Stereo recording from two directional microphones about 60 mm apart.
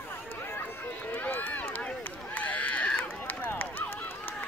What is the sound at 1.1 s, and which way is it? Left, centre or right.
Run, left.